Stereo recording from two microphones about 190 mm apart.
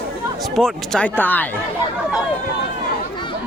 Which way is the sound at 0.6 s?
5° left (ahead or behind).